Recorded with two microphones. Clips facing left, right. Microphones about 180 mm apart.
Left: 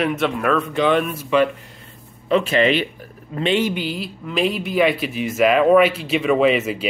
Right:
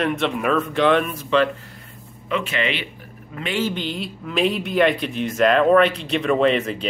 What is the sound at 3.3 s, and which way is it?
Speech, 25° left (ahead or behind).